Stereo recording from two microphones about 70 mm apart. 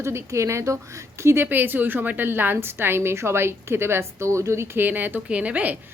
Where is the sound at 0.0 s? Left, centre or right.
Right.